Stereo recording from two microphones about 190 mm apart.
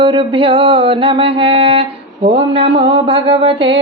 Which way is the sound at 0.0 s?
25° right (ahead or behind).